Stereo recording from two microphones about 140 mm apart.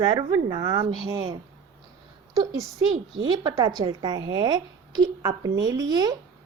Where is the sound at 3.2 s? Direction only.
35° right (ahead or behind).